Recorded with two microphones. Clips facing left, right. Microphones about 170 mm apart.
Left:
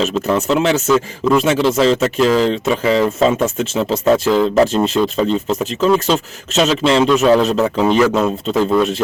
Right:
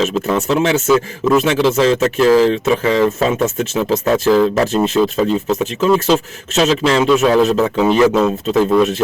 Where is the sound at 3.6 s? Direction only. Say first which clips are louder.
Even; 30° left (ahead or behind).